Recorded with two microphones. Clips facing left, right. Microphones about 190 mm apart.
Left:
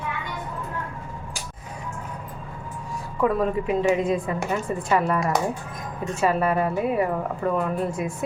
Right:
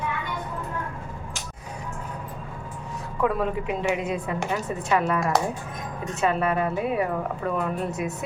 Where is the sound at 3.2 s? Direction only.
Centre (ahead or behind).